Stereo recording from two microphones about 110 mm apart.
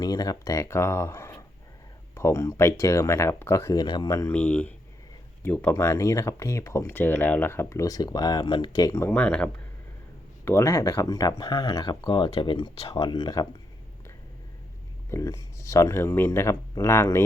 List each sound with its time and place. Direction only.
0.0 s speech: 35° left (ahead or behind)
4.3 s speech: 10° left (ahead or behind); by 9.0 s 35° left (ahead or behind)
9.0 s speech: 15° left (ahead or behind)
10.4 s speech: 25° left (ahead or behind)
15.1 s speech: 30° left (ahead or behind)